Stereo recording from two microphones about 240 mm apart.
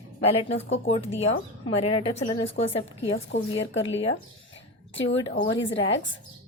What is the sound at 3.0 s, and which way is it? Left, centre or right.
Speech, left.